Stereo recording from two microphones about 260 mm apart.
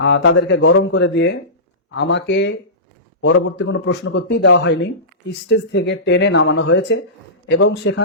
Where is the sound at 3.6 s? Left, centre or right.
Left.